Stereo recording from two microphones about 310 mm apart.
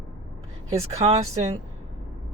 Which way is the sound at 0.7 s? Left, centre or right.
Centre.